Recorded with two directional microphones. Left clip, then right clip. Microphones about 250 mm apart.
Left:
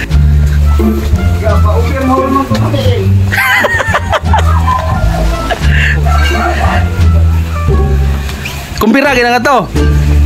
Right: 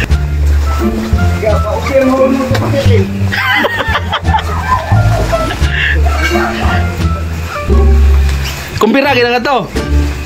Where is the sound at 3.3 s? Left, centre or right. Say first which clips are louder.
Left 3 dB; centre.